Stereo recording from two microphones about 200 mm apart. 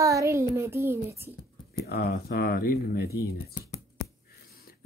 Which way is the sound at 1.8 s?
50° left (ahead or behind).